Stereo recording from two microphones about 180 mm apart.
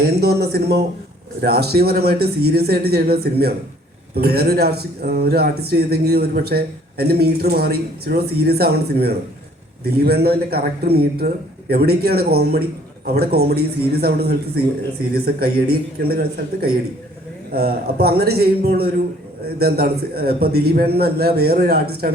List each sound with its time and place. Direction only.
0.0 s speech: 60° right (ahead or behind)